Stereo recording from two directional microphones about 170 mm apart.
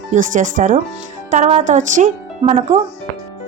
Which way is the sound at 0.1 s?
50° right (ahead or behind).